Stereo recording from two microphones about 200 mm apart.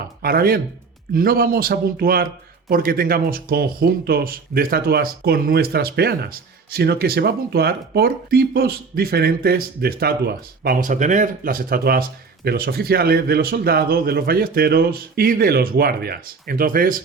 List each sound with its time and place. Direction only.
0.2 s speech: 50° right (ahead or behind)